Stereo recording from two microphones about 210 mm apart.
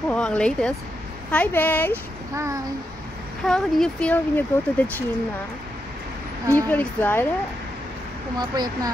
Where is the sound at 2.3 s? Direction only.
15° right (ahead or behind).